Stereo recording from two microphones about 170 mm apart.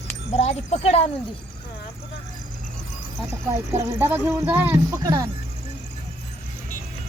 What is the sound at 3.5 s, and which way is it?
Speech, 15° right (ahead or behind).